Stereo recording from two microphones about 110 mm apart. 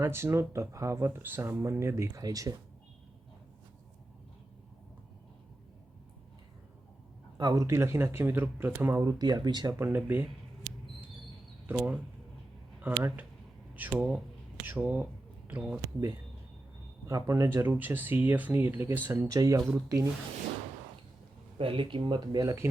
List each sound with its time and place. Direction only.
0.0 s speech: 20° right (ahead or behind)
7.3 s speech: 35° right (ahead or behind)
7.7 s speech: 25° right (ahead or behind)
9.1 s speech: 40° right (ahead or behind)
9.7 s speech: 20° right (ahead or behind)
11.6 s speech: 15° right (ahead or behind)
17.1 s speech: 30° right (ahead or behind)
19.3 s speech: 30° right (ahead or behind)
21.6 s speech: 55° right (ahead or behind); by 22.6 s 35° right (ahead or behind)